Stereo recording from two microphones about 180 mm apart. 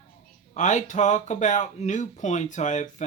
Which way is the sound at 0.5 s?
40° left (ahead or behind).